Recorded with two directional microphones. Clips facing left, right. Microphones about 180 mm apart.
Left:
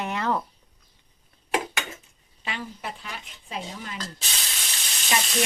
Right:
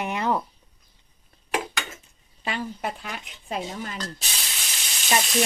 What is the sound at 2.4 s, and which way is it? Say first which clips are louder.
Speech: right 5 dB; 45° right (ahead or behind).